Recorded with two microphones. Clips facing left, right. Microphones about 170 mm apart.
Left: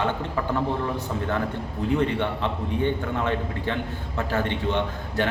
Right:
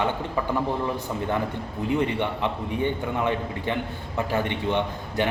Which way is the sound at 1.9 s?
15° right (ahead or behind).